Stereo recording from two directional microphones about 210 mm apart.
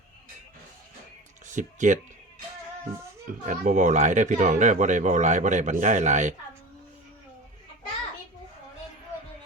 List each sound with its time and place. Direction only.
1.5 s speech: 35° right (ahead or behind)
3.4 s speech: 35° right (ahead or behind)